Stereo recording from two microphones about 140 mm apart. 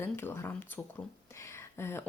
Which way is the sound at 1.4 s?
20° left (ahead or behind).